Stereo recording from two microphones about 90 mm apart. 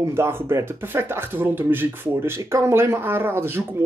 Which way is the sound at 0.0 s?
30° right (ahead or behind).